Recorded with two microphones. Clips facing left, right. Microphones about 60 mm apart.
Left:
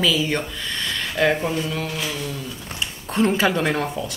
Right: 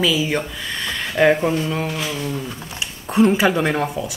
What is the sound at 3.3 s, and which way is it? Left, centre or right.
Speech, centre.